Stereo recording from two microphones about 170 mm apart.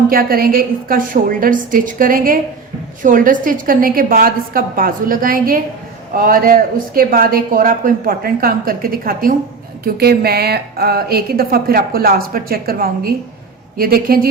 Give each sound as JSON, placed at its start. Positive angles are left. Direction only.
{"t": 0.1, "sound": "speech", "side_deg": -60}